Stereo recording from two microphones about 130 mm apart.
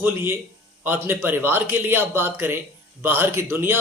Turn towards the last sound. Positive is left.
turn(degrees=-15)  # may be behind; listen again after turning